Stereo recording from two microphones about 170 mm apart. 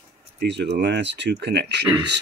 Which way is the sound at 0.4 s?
90° right.